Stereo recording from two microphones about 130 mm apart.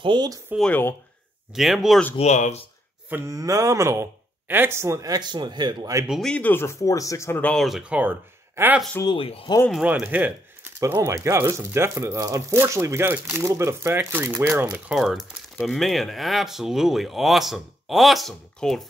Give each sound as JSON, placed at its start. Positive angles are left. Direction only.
{"t": 0.0, "sound": "speech", "side_deg": -35}
{"t": 0.6, "sound": "speech", "side_deg": 15}
{"t": 1.5, "sound": "speech", "side_deg": 0}
{"t": 2.1, "sound": "speech", "side_deg": 60}
{"t": 3.1, "sound": "mantra", "side_deg": -15}
{"t": 3.3, "sound": "speech", "side_deg": -25}
{"t": 6.0, "sound": "speech", "side_deg": 0}
{"t": 6.3, "sound": "speech", "side_deg": 15}
{"t": 7.5, "sound": "speech", "side_deg": 0}
{"t": 9.0, "sound": "speech", "side_deg": 40}
{"t": 9.7, "sound": "speech", "side_deg": -5}
{"t": 14.9, "sound": "speech", "side_deg": -5}